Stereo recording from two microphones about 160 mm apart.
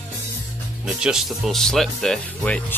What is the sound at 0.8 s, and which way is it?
Speech, 5° right (ahead or behind).